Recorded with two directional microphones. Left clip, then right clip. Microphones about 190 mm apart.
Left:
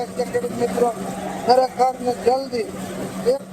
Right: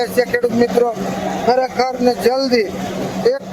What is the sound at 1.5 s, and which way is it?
A man's voice, 20° right (ahead or behind).